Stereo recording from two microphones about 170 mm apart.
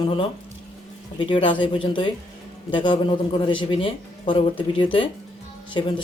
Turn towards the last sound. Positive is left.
turn(degrees=30)  # may be behind; listen again after turning